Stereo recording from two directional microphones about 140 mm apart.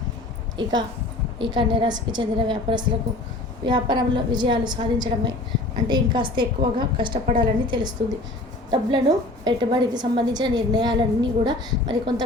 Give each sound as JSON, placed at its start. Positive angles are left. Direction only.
{"t": 0.5, "sound": "a woman's voice", "side_deg": -30}